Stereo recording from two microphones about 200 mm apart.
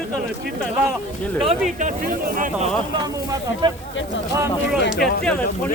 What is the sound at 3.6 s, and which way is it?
Speech, 20° right (ahead or behind).